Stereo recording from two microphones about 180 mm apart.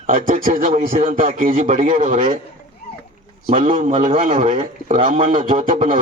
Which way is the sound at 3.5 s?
30° right (ahead or behind).